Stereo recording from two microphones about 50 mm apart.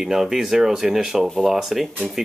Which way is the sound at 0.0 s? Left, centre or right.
Centre.